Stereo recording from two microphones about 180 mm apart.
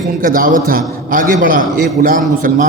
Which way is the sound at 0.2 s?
50° right (ahead or behind).